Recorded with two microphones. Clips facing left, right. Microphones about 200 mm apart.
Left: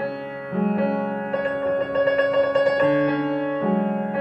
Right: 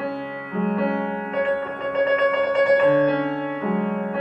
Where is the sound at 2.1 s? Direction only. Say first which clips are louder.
Left 1 dB; 35° left (ahead or behind).